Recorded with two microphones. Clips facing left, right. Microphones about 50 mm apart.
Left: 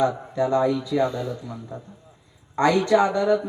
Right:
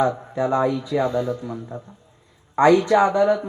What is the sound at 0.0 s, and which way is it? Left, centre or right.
A man's voice, right.